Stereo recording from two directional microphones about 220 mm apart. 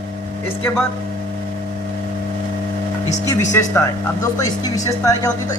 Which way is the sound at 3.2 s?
15° left (ahead or behind).